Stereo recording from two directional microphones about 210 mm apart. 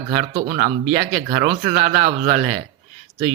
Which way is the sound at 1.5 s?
25° right (ahead or behind).